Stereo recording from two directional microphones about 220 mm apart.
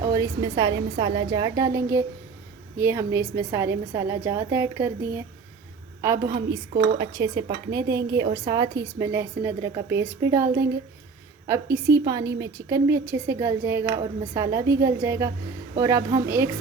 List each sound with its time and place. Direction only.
0.0 s speech: 15° right (ahead or behind)